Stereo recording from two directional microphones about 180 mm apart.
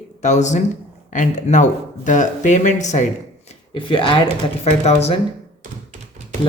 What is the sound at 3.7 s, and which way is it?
A woman's voice, 25° left (ahead or behind).